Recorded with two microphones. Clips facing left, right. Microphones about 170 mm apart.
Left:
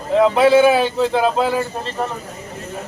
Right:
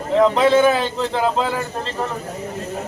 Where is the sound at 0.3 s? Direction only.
10° left (ahead or behind).